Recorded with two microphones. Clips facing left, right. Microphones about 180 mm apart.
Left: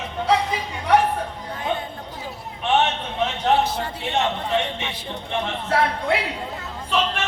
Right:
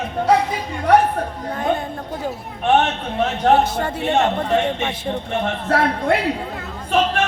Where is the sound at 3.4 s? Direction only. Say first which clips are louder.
Right 5 dB; 50° right (ahead or behind).